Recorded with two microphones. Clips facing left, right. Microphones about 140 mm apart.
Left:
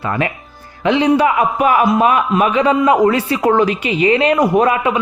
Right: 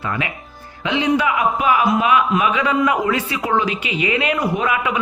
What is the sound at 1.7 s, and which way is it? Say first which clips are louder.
Speech: left 2 dB; 45° left (ahead or behind).